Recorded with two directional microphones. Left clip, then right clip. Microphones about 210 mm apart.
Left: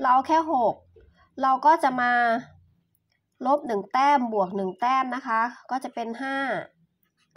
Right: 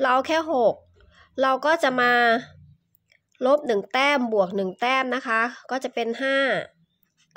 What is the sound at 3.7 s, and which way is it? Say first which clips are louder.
A woman's voice: even; 25° right (ahead or behind).